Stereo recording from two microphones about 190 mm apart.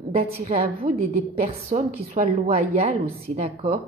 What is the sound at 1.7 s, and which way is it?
A woman's voice, 30° right (ahead or behind).